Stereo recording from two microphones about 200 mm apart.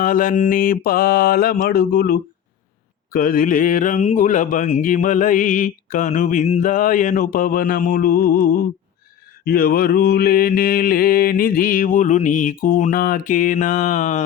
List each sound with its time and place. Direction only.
0.0 s mantra: 45° left (ahead or behind)
3.1 s speech: 45° left (ahead or behind)
9.4 s mantra: 50° left (ahead or behind)